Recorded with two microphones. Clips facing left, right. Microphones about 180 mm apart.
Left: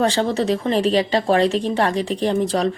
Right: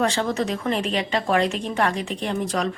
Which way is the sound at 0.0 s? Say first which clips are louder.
Left 4 dB; 35° left (ahead or behind).